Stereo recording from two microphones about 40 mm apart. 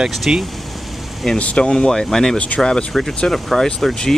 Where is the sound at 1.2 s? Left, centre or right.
Centre.